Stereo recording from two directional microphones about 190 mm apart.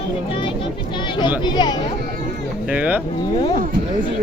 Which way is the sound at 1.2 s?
25° left (ahead or behind).